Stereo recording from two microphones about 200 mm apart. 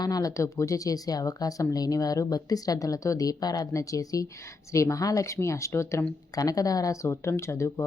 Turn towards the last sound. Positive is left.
turn(degrees=15)  # may be behind; listen again after turning